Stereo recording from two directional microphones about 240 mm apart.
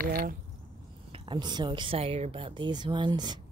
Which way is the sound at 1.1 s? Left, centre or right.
Centre.